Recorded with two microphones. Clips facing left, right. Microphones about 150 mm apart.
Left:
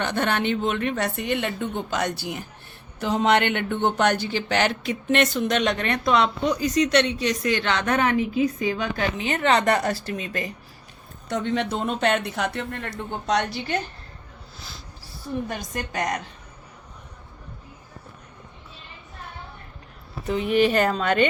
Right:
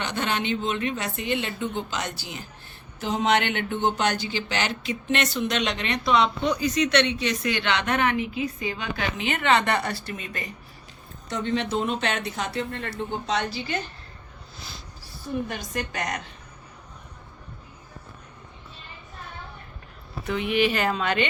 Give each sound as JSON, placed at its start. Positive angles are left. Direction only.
{"t": 0.0, "sound": "speech", "side_deg": 55}
{"t": 6.5, "sound": "a woman's voice", "side_deg": 40}
{"t": 11.3, "sound": "speech", "side_deg": 60}
{"t": 15.4, "sound": "a woman's voice", "side_deg": 45}
{"t": 20.2, "sound": "a woman's voice", "side_deg": 35}